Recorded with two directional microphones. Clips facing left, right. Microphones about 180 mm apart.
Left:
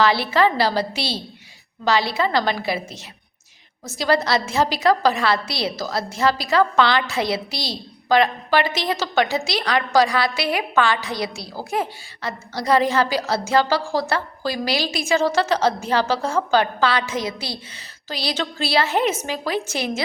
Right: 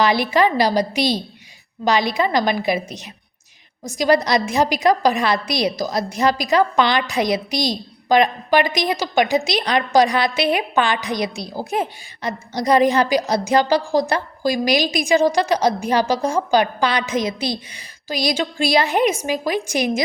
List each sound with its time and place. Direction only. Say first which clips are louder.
0.0 s a woman's voice: right 1 dB; 15° right (ahead or behind)